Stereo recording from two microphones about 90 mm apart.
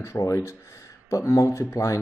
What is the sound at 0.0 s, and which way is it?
Speech, 30° left (ahead or behind).